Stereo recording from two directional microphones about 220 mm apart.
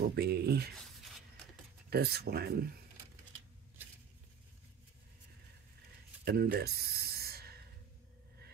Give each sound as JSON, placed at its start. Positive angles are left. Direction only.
{"t": 0.0, "sound": "speech", "side_deg": -45}
{"t": 1.9, "sound": "speech", "side_deg": -45}
{"t": 6.2, "sound": "a sound", "side_deg": -45}